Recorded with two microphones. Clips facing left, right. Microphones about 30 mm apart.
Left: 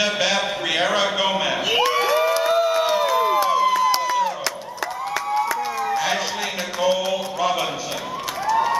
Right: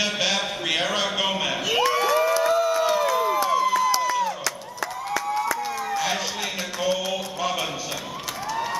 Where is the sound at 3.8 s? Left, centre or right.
Left.